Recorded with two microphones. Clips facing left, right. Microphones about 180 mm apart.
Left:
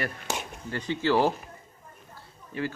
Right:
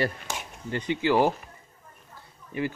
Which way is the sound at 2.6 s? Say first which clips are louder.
Right 2 dB; 15° right (ahead or behind).